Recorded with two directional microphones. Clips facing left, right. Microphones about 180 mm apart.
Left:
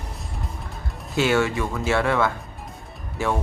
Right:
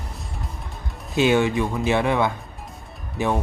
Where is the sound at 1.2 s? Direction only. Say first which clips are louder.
Right 2 dB; 20° right (ahead or behind).